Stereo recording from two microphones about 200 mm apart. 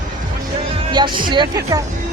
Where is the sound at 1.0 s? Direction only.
20° right (ahead or behind).